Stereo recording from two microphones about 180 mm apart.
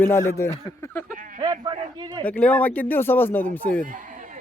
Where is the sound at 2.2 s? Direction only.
10° left (ahead or behind).